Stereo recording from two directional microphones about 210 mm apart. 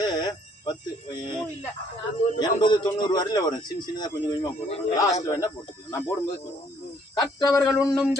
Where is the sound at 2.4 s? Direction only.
20° left (ahead or behind).